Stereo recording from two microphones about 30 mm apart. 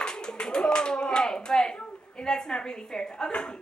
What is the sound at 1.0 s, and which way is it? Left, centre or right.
A woman's voice, centre.